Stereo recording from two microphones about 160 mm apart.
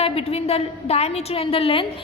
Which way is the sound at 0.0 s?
40° left (ahead or behind).